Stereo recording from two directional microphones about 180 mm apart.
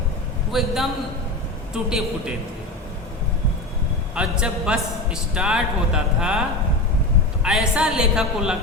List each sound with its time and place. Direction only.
0.5 s a man's voice: centre (ahead or behind)
4.1 s a man's voice: 5° right (ahead or behind)
7.4 s a man's voice: 5° right (ahead or behind)